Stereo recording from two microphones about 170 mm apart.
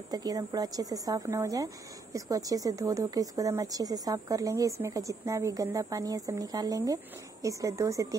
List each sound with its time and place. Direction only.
0.1 s speech: 20° right (ahead or behind)